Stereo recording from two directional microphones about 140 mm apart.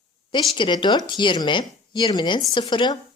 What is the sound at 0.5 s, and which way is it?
A woman's voice, 35° left (ahead or behind).